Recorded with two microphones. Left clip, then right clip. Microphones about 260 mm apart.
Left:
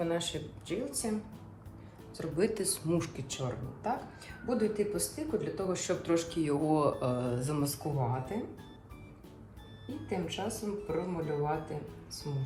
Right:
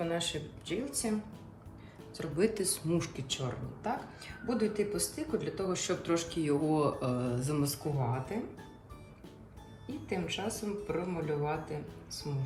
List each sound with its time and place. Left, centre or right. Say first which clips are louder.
0.0 s speech: left 1 dB; centre
2.1 s speech: even; centre
7.9 s speech: left 1 dB; centre
9.9 s speech: even; centre